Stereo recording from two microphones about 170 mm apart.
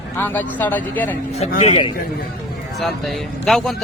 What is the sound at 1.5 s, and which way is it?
Speech, 35° left (ahead or behind).